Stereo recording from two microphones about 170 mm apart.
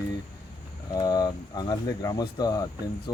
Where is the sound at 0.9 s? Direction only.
25° left (ahead or behind).